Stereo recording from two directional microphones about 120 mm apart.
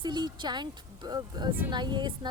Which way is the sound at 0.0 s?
40° right (ahead or behind).